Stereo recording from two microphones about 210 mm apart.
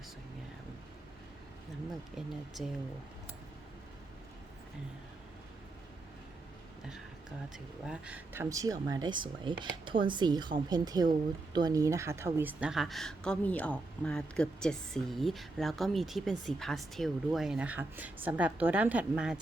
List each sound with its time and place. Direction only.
2.6 s a woman's voice: centre (ahead or behind)
7.5 s a woman's voice: 5° right (ahead or behind)